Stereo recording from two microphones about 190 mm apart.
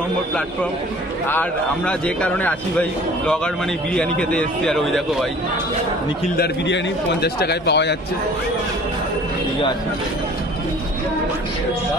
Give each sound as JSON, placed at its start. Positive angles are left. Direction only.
{"t": 1.3, "sound": "a man's voice", "side_deg": 5}
{"t": 6.3, "sound": "a man's voice", "side_deg": 60}